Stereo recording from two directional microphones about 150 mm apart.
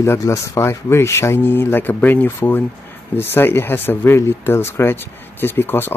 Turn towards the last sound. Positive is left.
turn(degrees=15)  # may be behind; listen again after turning